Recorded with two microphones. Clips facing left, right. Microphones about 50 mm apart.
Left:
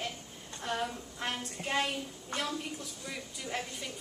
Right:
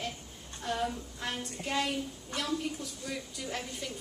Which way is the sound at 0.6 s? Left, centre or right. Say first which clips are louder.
Right 2 dB; left.